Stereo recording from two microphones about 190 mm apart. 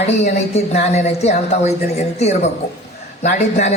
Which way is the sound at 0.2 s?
35° left (ahead or behind).